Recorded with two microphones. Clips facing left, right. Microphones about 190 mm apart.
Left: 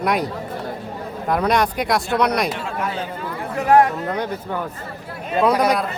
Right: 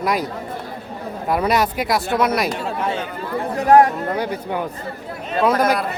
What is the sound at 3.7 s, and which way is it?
Speech, 40° right (ahead or behind).